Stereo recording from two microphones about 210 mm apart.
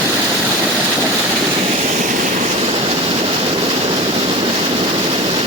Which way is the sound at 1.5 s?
30° right (ahead or behind).